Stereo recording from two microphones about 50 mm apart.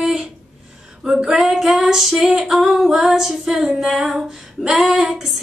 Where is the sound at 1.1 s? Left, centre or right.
Centre.